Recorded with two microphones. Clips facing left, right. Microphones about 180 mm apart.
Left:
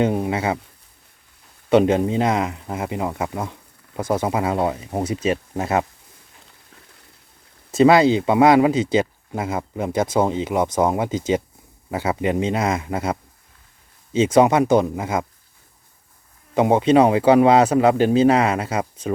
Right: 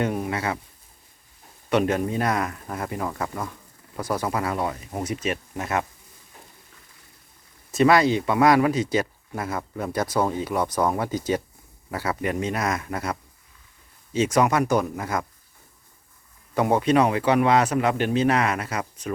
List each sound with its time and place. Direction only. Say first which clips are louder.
0.0 s speech: left 5 dB; 25° left (ahead or behind)
1.7 s speech: left 6 dB; 25° left (ahead or behind)
7.7 s speech: left 5 dB; 25° left (ahead or behind)
16.6 s speech: left 5 dB; 20° left (ahead or behind)